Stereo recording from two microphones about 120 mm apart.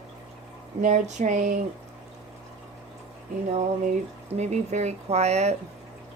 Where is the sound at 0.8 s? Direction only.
90° right.